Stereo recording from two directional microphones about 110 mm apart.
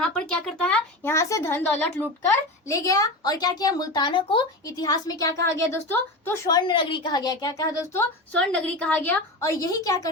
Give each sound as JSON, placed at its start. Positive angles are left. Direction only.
{"t": 0.0, "sound": "speech", "side_deg": 10}
{"t": 1.0, "sound": "a woman's voice", "side_deg": 25}
{"t": 2.2, "sound": "a woman's voice", "side_deg": 30}
{"t": 4.6, "sound": "a woman's voice", "side_deg": 35}
{"t": 6.6, "sound": "a woman's voice", "side_deg": 45}
{"t": 8.3, "sound": "a woman's voice", "side_deg": 10}
{"t": 9.4, "sound": "a woman's voice", "side_deg": 30}